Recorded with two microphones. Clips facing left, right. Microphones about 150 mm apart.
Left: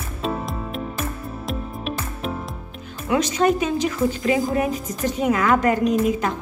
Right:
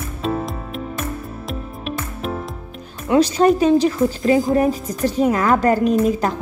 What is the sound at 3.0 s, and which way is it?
A woman's voice, 30° right (ahead or behind).